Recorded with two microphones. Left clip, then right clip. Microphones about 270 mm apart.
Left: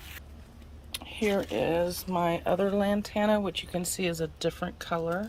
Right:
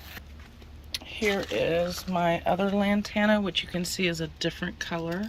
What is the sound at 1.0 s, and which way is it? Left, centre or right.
Speech, centre.